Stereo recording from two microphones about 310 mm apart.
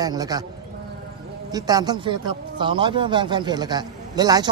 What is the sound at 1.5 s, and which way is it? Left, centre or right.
Speech, centre.